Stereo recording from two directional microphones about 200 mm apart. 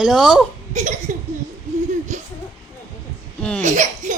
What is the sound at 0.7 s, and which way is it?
Speech, 35° right (ahead or behind).